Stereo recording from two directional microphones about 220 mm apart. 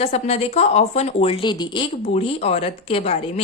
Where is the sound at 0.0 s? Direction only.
30° left (ahead or behind).